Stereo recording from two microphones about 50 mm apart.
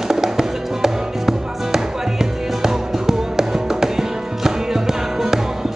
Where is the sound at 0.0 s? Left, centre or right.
Centre.